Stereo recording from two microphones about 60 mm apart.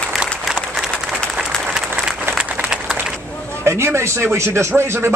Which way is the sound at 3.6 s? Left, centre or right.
Right.